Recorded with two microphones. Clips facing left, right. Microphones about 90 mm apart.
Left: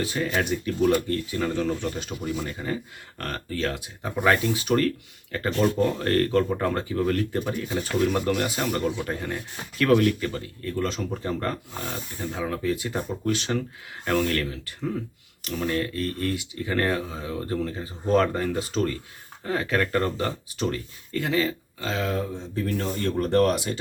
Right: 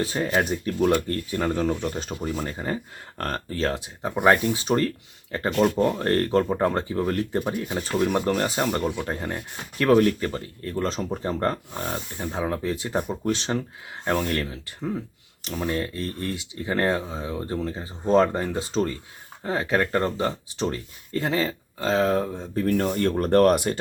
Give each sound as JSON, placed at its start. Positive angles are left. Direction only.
{"t": 0.0, "sound": "speech", "side_deg": -35}
{"t": 22.9, "sound": "speech", "side_deg": -55}